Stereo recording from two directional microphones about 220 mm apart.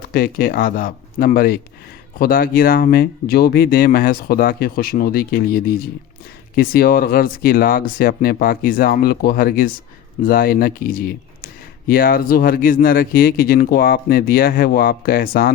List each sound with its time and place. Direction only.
0.1 s speech: 45° left (ahead or behind)